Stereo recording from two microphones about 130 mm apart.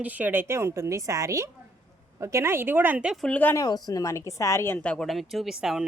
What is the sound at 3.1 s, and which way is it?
Speech, 5° left (ahead or behind).